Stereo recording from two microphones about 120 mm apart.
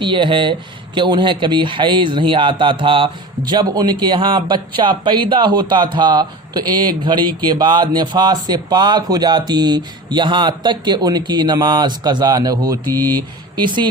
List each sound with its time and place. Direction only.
0.0 s speech: 40° right (ahead or behind)